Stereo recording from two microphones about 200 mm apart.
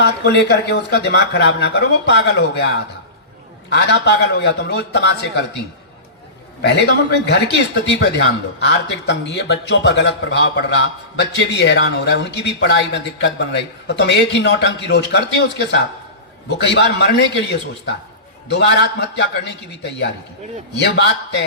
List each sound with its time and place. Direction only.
0.0 s a man's voice: 60° left (ahead or behind)
6.6 s a man's voice: 60° left (ahead or behind)
20.8 s a man's voice: 60° left (ahead or behind)